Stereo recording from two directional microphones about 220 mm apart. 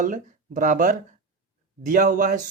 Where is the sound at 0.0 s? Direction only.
35° right (ahead or behind).